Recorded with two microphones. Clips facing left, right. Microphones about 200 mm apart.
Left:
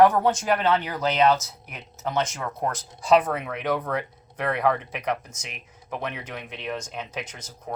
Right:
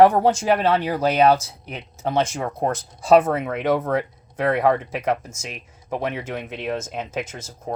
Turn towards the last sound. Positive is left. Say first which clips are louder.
# right 5 dB
turn(degrees=-25)  # may be behind; listen again after turning